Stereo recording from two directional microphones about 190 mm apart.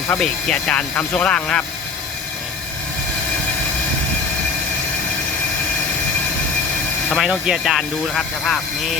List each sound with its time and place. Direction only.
0.2 s speech: 5° left (ahead or behind)
7.1 s speech: centre (ahead or behind)